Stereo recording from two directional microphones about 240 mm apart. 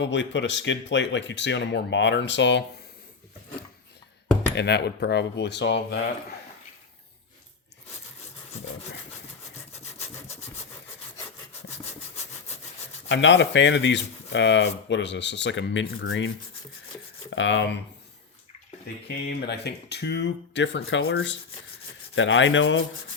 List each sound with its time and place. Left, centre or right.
0.0 s speech: left
4.5 s speech: left
9.7 s rub: left
13.1 s speech: left
17.3 s speech: left
19.0 s speech: left